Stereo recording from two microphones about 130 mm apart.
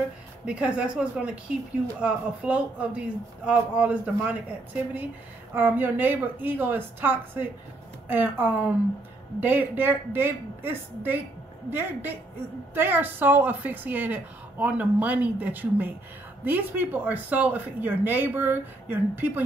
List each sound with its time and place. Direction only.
0.5 s speech: 10° right (ahead or behind)